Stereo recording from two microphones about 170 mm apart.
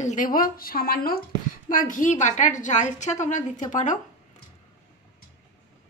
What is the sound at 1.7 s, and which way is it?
Speech, 50° left (ahead or behind).